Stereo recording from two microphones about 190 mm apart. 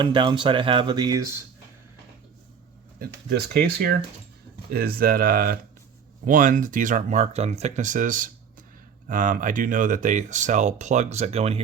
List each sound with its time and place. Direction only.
0.0 s speech: 25° right (ahead or behind)
3.2 s speech: 55° right (ahead or behind); by 11.6 s 35° right (ahead or behind)